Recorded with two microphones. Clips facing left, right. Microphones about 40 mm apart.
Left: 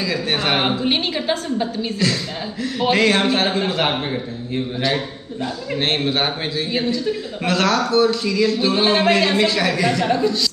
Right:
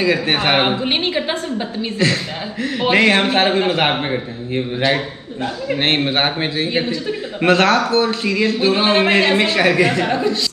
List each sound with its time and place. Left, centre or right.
0.0 s a man's voice: right